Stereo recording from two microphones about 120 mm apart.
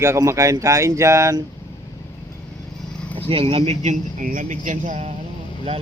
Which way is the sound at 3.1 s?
55° right (ahead or behind).